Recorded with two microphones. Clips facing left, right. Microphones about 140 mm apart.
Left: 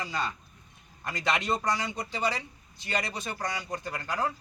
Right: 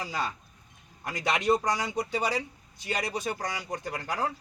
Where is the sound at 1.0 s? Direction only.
10° right (ahead or behind).